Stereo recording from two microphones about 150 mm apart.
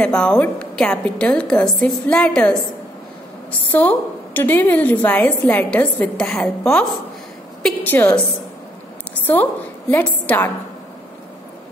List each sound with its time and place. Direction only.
0.0 s a woman's voice: 5° left (ahead or behind)
3.7 s a woman's voice: 10° left (ahead or behind)
7.9 s a woman's voice: 15° left (ahead or behind)
9.2 s a woman's voice: 15° left (ahead or behind)